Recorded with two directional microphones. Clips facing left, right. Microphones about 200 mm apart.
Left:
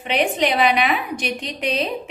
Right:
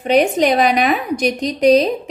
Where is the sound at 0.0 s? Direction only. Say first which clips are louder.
Right 6 dB; 40° right (ahead or behind).